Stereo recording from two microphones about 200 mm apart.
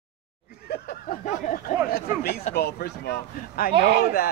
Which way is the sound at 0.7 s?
45° left (ahead or behind).